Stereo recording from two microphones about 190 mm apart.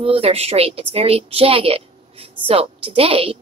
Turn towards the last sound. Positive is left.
turn(degrees=-25)  # may be behind; listen again after turning